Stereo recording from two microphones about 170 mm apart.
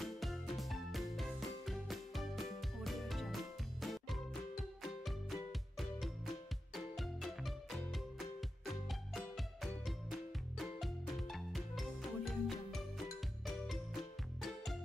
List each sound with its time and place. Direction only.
0.0 s music: centre (ahead or behind)